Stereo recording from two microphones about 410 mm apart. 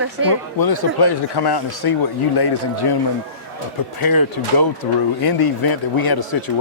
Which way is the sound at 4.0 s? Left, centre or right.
Left.